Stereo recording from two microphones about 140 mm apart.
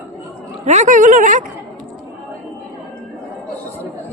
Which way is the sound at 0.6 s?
55° right (ahead or behind).